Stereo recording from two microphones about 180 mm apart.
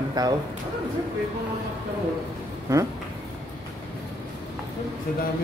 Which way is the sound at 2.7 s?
15° right (ahead or behind).